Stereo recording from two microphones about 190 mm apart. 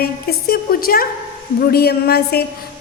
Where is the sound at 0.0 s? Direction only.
55° left (ahead or behind).